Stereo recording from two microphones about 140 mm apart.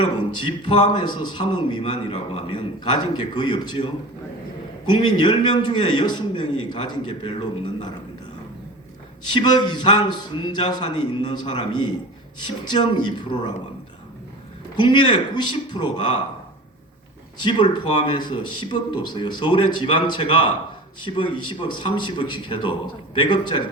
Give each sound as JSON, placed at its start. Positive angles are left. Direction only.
{"t": 0.4, "sound": "a man's voice", "side_deg": 35}
{"t": 4.9, "sound": "a man's voice", "side_deg": 30}
{"t": 9.3, "sound": "a man's voice", "side_deg": 30}
{"t": 14.8, "sound": "a man's voice", "side_deg": 35}
{"t": 17.4, "sound": "a man's voice", "side_deg": 35}